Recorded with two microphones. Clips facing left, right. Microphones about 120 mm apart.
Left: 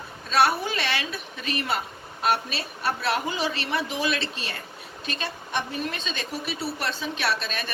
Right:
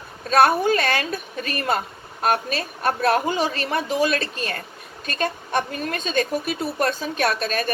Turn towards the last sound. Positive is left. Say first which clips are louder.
# right 6 dB
turn(degrees=-45)  # may be behind; listen again after turning